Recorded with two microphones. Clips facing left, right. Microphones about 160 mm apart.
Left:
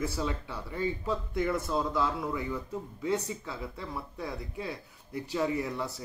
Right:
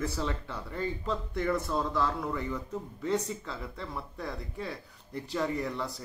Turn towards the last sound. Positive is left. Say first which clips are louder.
# left 1 dB
turn(degrees=10)  # may be behind; listen again after turning